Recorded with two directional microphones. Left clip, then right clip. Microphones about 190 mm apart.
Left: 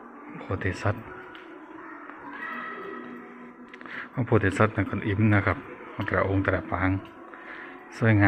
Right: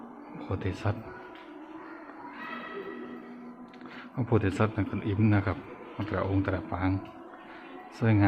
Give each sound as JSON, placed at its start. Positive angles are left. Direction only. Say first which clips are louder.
{"t": 0.3, "sound": "speech", "louder": "left 4 dB", "side_deg": -5}
{"t": 3.9, "sound": "a man's voice", "louder": "left 4 dB", "side_deg": 0}
{"t": 7.9, "sound": "a man's voice", "louder": "left 4 dB", "side_deg": 0}